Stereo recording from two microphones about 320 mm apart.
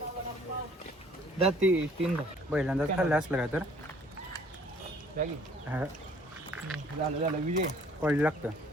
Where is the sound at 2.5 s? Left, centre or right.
Centre.